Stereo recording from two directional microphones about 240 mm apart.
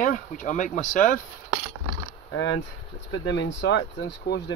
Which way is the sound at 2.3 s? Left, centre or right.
Left.